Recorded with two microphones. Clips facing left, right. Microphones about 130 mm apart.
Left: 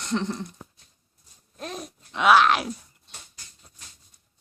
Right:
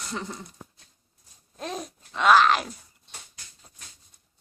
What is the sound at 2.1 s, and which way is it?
Speech, 5° left (ahead or behind).